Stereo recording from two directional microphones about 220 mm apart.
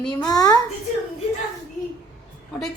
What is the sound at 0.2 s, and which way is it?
Speech, 15° left (ahead or behind).